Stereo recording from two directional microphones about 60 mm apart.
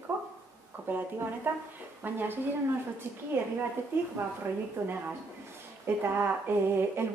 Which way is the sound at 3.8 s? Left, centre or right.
Right.